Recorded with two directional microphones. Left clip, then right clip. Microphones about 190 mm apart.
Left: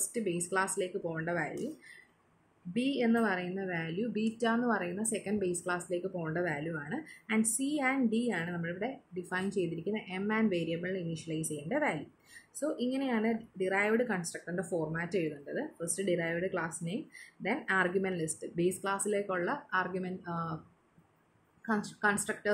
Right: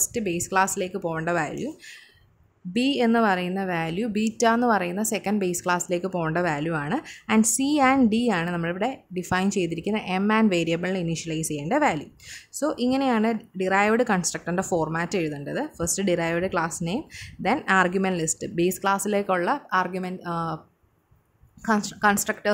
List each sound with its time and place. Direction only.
0.1 s a woman's voice: 60° right (ahead or behind)
2.7 s a woman's voice: 60° right (ahead or behind)
21.6 s a woman's voice: 55° right (ahead or behind)